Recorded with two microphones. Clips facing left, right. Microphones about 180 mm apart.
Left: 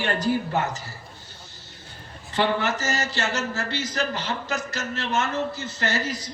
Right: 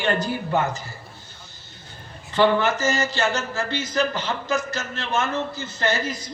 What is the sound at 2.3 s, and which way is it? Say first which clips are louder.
A man's voice: right 5 dB; 30° right (ahead or behind).